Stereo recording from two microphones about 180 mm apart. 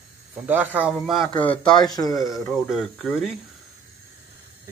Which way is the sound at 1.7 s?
20° left (ahead or behind).